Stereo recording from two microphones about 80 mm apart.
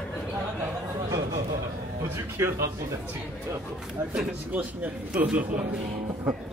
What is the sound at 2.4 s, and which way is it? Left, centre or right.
Speech, right.